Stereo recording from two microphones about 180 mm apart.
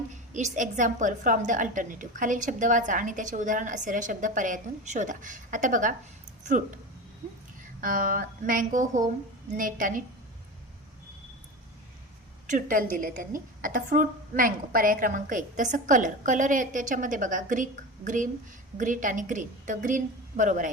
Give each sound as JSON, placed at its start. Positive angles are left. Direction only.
{"t": 0.1, "sound": "a woman's voice", "side_deg": -45}
{"t": 7.8, "sound": "a woman's voice", "side_deg": -50}
{"t": 12.5, "sound": "a woman's voice", "side_deg": -50}